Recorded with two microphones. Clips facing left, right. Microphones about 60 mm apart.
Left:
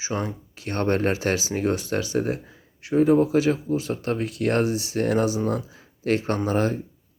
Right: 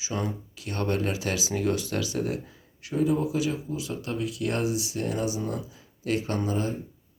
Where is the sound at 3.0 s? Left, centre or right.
Left.